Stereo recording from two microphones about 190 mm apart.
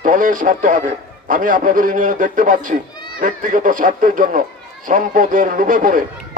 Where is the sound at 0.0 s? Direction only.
45° right (ahead or behind).